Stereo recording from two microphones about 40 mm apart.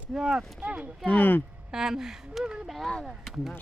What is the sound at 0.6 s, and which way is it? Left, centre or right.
Speech, right.